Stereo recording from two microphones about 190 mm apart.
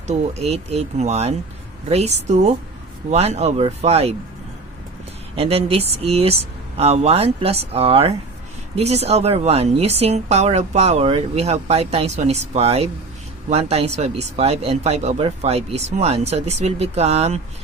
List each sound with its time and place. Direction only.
0.1 s speech: 35° right (ahead or behind)
5.4 s speech: 30° right (ahead or behind)